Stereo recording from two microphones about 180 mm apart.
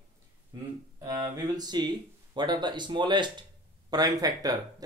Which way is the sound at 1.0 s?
20° right (ahead or behind).